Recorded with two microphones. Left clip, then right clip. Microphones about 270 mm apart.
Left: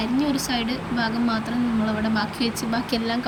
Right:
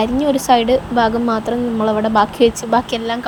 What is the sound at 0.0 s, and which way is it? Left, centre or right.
A woman's voice, centre.